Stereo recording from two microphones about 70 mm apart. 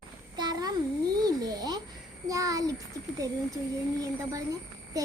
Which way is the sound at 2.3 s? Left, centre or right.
Right.